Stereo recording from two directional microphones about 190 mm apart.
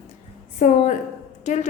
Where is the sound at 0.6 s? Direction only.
40° left (ahead or behind).